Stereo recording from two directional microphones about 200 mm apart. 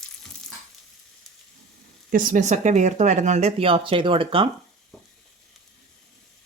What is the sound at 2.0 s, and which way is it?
Speech, 40° right (ahead or behind).